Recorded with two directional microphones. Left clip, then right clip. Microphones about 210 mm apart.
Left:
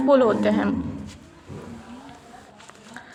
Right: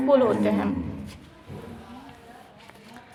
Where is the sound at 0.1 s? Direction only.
25° left (ahead or behind).